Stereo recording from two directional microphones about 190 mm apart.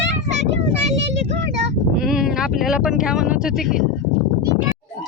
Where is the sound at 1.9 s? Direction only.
5° right (ahead or behind).